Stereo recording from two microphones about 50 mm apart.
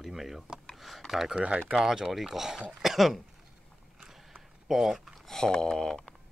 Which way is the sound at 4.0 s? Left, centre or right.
Centre.